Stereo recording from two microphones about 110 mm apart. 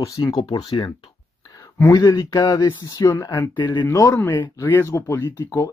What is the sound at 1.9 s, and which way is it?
Speech, 35° left (ahead or behind).